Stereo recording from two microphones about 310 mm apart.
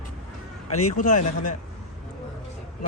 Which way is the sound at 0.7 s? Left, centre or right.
Left.